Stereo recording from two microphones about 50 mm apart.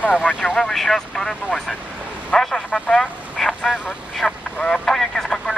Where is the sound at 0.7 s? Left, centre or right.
Centre.